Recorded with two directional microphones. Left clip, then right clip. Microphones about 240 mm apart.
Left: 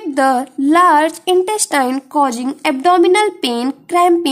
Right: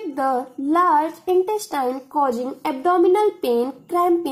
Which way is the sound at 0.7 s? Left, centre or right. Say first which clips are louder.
Left 7 dB; left.